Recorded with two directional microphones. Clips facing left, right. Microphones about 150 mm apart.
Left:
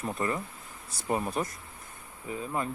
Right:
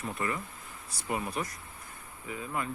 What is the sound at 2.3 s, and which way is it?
Speech, 30° left (ahead or behind).